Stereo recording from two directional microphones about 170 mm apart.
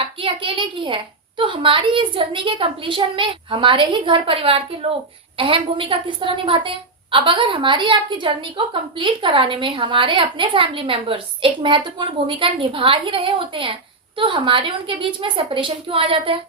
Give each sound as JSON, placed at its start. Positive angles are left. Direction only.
{"t": 0.0, "sound": "a woman's voice", "side_deg": -30}